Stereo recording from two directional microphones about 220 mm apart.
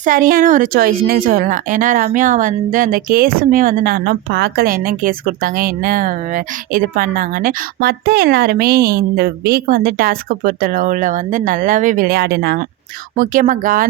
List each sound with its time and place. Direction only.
0.0 s a woman's voice: 40° right (ahead or behind)